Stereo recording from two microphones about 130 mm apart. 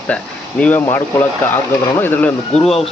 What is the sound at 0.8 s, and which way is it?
Speech, 20° left (ahead or behind).